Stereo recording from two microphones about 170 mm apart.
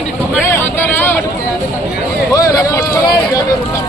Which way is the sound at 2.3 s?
20° left (ahead or behind).